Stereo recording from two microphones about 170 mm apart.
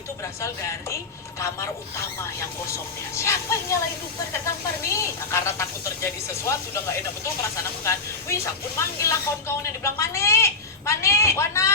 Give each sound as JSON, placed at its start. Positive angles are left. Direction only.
{"t": 0.4, "sound": "speech", "side_deg": 15}
{"t": 2.7, "sound": "speech", "side_deg": 15}
{"t": 9.0, "sound": "speech", "side_deg": 15}